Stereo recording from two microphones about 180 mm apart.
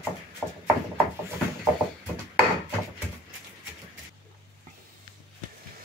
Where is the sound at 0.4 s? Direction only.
10° left (ahead or behind).